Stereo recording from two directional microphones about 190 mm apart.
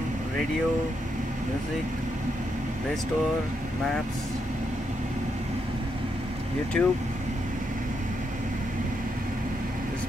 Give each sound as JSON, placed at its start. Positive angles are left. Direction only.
{"t": 6.7, "sound": "speech", "side_deg": 5}